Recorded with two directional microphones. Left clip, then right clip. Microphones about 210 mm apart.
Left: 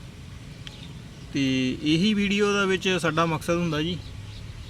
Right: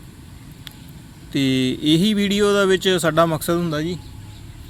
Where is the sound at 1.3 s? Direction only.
35° right (ahead or behind); by 3.9 s 20° right (ahead or behind).